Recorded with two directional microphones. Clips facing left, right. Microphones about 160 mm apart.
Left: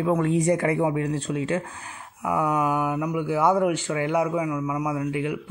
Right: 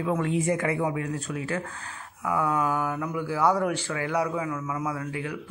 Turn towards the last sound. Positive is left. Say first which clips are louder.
# left 4 dB
turn(degrees=20)  # may be behind; listen again after turning